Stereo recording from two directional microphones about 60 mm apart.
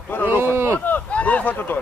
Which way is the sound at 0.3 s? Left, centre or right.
Right.